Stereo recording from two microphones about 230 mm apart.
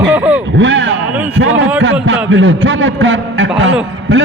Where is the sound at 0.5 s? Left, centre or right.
Right.